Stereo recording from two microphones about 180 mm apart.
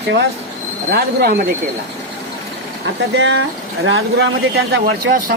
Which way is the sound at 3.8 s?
90° right.